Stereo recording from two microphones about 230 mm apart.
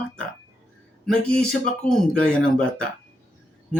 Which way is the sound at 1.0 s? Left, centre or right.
Centre.